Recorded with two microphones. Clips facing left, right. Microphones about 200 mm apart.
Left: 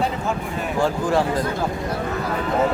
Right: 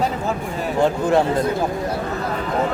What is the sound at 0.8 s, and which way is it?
Speech, 20° right (ahead or behind).